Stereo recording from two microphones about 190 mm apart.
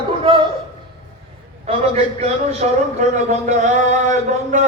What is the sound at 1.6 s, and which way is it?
A man's voice, 35° right (ahead or behind).